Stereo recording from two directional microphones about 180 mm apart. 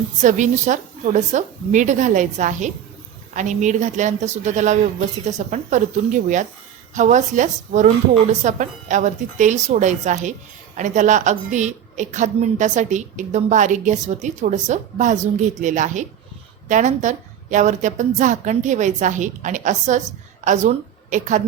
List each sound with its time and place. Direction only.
0.2 s a woman's voice: 40° right (ahead or behind)